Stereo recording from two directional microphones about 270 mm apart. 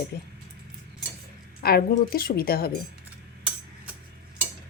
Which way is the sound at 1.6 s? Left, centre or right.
Left.